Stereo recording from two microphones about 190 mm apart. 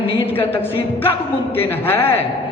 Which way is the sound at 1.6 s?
10° left (ahead or behind).